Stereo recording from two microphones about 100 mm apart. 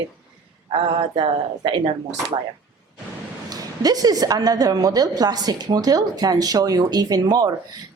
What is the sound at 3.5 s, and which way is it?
Speech, 40° right (ahead or behind).